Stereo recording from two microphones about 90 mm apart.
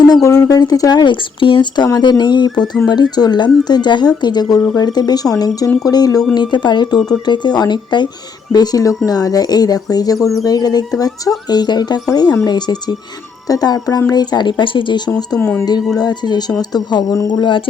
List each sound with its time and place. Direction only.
0.1 s speech: 40° left (ahead or behind)
1.1 s speech: 70° left (ahead or behind); by 6.2 s 45° left (ahead or behind)
6.3 s speech: 55° left (ahead or behind)
8.5 s speech: 45° left (ahead or behind)
15.4 s speech: 25° left (ahead or behind)
16.0 s speech: 50° left (ahead or behind)